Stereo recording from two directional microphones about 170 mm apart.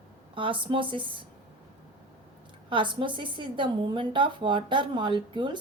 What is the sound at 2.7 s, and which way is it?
A woman's voice, 30° right (ahead or behind).